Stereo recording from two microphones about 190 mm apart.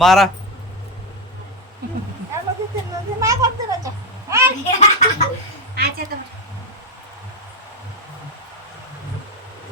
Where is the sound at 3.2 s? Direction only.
15° right (ahead or behind).